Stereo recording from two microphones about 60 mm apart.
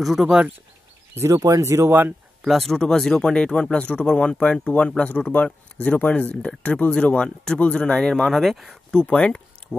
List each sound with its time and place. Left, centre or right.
0.0 s speech: centre
1.3 s speech: right
1.9 s speech: right
2.4 s speech: centre
9.0 s speech: centre